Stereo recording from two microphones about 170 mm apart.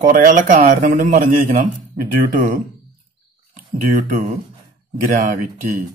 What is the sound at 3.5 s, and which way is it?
Speech, 55° right (ahead or behind).